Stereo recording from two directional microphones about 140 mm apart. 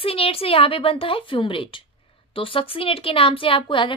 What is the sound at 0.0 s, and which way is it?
A woman's voice, 40° left (ahead or behind).